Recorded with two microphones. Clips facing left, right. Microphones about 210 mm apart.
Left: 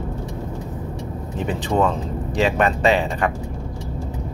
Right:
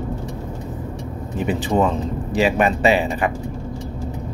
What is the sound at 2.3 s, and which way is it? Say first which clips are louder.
Speech: right 1 dB; 5° right (ahead or behind).